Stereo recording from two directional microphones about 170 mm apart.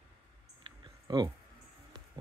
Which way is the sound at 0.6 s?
25° right (ahead or behind).